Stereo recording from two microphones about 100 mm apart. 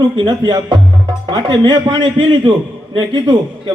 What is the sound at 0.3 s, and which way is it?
A man's voice, 50° right (ahead or behind).